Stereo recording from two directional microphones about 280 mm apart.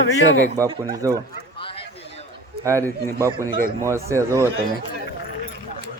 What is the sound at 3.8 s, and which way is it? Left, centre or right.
Speech, centre.